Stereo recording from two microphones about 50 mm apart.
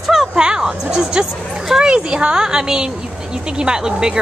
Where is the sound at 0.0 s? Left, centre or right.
Centre.